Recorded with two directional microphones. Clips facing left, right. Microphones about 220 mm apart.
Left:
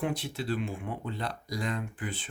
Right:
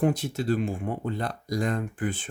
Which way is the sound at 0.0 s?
45° right (ahead or behind).